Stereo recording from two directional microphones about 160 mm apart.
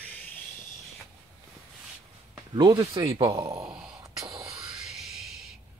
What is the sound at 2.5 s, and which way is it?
A man's voice, 25° right (ahead or behind).